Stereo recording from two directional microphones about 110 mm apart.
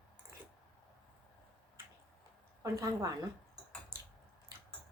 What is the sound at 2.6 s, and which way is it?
Speech, 30° right (ahead or behind).